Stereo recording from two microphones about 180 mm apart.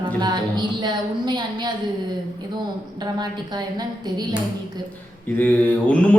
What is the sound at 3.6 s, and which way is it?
Speech, 20° right (ahead or behind).